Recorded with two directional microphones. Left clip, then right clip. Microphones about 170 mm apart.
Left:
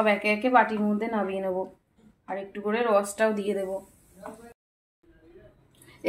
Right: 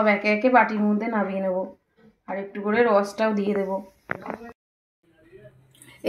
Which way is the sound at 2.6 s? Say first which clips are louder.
Right 4 dB; 25° right (ahead or behind).